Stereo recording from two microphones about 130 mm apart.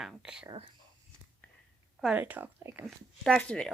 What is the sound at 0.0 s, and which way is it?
Speech, 5° right (ahead or behind).